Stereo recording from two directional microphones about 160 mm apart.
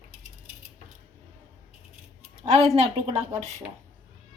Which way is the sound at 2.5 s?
40° right (ahead or behind).